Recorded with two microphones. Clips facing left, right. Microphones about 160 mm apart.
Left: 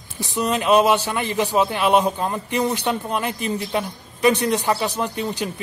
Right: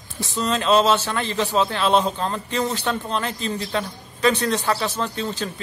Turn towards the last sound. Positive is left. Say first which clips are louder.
# left 2 dB
turn(degrees=15)  # may be behind; listen again after turning